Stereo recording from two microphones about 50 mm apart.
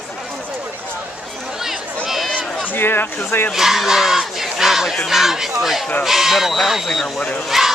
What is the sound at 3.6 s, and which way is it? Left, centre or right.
Battle cry, centre.